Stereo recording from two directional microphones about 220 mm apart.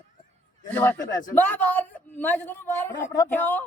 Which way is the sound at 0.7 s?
10° left (ahead or behind).